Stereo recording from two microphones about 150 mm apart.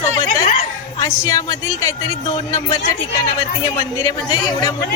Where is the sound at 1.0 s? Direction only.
20° left (ahead or behind).